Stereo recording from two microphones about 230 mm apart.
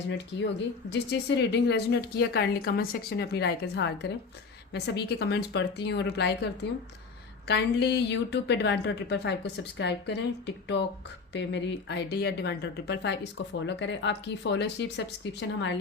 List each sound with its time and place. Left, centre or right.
0.1 s speech: left